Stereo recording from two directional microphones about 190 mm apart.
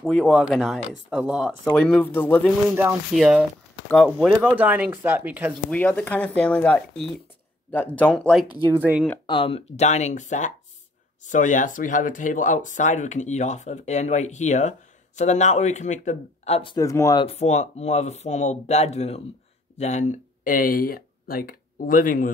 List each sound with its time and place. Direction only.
0.0 s speech: centre (ahead or behind)
2.7 s speech: 10° right (ahead or behind)
5.7 s speech: 5° left (ahead or behind)
8.7 s speech: 10° right (ahead or behind)
9.2 s speech: 25° left (ahead or behind)
16.7 s speech: 15° left (ahead or behind); by 22.3 s 45° left (ahead or behind)